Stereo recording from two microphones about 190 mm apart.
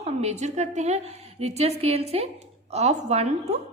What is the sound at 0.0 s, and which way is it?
A woman's voice, 35° right (ahead or behind).